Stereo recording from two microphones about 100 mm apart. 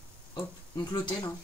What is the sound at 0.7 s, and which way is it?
Speech, 45° left (ahead or behind).